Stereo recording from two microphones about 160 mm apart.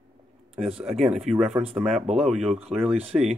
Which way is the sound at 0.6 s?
40° right (ahead or behind).